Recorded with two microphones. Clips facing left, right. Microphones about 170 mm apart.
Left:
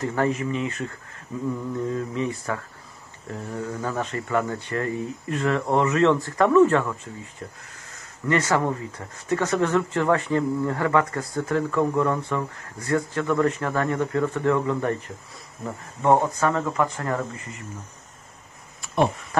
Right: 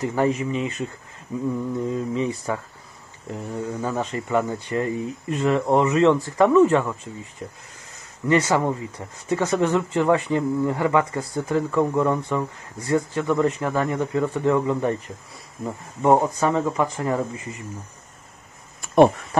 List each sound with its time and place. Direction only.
0.0 s speech: 15° right (ahead or behind)